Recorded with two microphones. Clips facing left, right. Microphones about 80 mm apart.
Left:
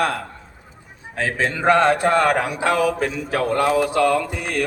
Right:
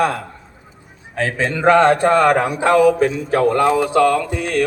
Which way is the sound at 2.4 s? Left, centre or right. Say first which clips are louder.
Right 4 dB; right.